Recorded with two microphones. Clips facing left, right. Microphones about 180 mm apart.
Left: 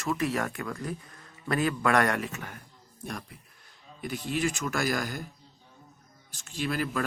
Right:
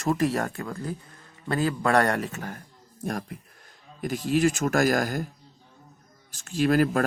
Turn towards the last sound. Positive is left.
turn(degrees=-45)  # may be behind; listen again after turning